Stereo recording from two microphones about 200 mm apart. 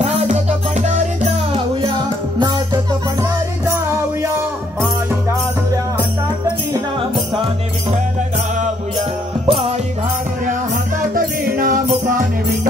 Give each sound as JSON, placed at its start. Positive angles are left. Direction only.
{"t": 0.0, "sound": "music", "side_deg": -30}
{"t": 9.5, "sound": "music", "side_deg": -30}
{"t": 11.1, "sound": "music", "side_deg": -45}